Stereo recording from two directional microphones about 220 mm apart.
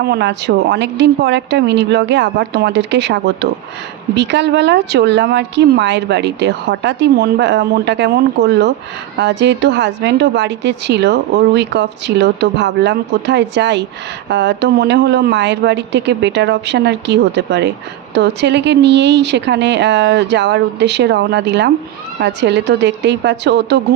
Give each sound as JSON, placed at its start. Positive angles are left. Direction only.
{"t": 0.0, "sound": "a woman's voice", "side_deg": -50}